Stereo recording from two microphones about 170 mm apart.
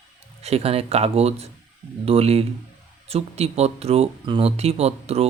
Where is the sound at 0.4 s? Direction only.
35° right (ahead or behind).